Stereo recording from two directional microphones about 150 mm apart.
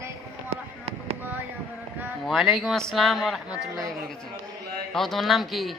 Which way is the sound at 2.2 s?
Centre (ahead or behind).